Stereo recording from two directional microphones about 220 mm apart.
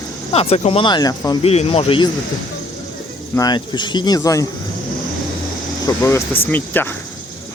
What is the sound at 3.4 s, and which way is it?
Speech, 20° left (ahead or behind).